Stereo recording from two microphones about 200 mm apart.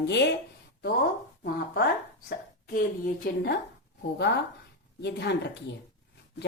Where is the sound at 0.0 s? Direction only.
60° left (ahead or behind).